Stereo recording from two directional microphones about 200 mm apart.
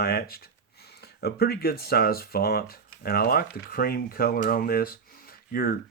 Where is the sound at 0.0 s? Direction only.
50° left (ahead or behind).